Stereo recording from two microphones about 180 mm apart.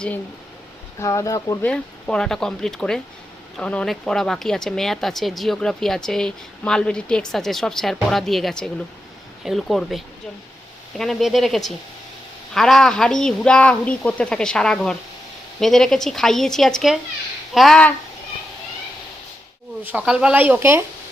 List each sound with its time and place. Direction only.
0.9 s speech: 15° left (ahead or behind)
1.7 s speech: 5° left (ahead or behind)
19.8 s speech: 5° right (ahead or behind)